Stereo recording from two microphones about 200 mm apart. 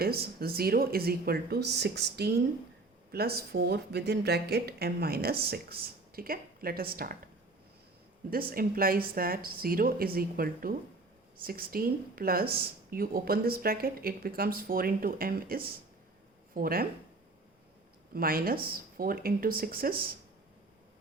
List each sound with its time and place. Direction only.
0.0 s a woman's voice: 50° right (ahead or behind)
8.3 s a woman's voice: 45° right (ahead or behind)
18.1 s a woman's voice: 45° right (ahead or behind)